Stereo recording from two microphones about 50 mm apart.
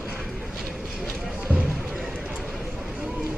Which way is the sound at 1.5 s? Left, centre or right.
Right.